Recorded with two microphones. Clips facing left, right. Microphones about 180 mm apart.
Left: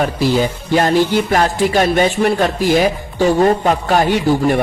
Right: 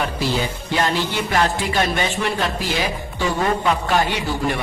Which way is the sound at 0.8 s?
40° left (ahead or behind).